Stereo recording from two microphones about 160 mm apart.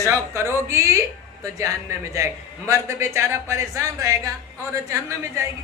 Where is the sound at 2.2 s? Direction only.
15° right (ahead or behind).